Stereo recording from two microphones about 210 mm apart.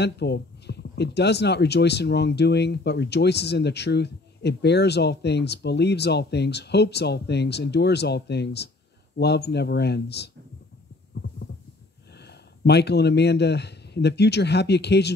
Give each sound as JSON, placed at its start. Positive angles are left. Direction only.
{"t": 0.0, "sound": "speech", "side_deg": 55}
{"t": 12.3, "sound": "speech", "side_deg": 50}